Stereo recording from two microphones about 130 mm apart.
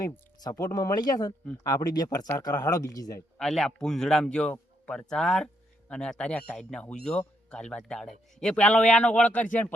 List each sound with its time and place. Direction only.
0.0 s speech: 30° left (ahead or behind)
3.3 s a man's voice: 5° left (ahead or behind)